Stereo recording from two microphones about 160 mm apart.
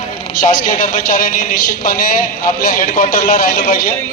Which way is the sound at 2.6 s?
60° left (ahead or behind).